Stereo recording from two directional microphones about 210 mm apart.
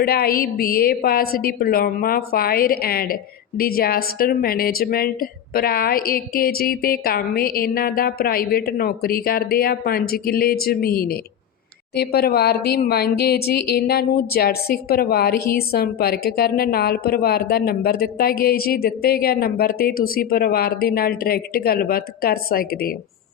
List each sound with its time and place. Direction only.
0.0 s speech: 45° left (ahead or behind)